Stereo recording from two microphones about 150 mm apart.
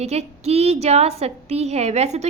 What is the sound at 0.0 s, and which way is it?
A woman's voice, 45° right (ahead or behind).